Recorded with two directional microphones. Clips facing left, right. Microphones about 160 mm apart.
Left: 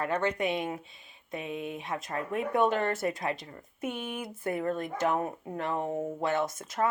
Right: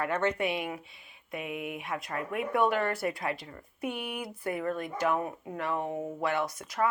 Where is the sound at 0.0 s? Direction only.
15° left (ahead or behind).